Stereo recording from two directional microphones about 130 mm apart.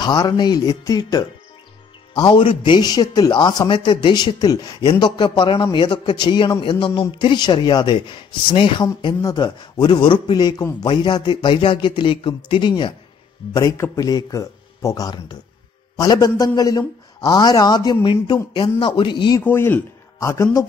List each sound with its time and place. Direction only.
0.0 s a man's voice: 30° left (ahead or behind)
2.1 s a man's voice: 40° left (ahead or behind)
13.5 s a man's voice: 25° left (ahead or behind)
19.4 s a man's voice: 15° left (ahead or behind)